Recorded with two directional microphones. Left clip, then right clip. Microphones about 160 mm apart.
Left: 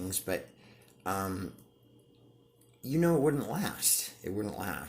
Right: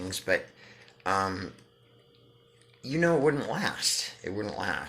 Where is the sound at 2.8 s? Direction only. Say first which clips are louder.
Right 3 dB; 50° left (ahead or behind).